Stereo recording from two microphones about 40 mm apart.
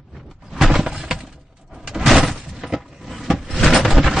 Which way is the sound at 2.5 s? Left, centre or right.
Centre.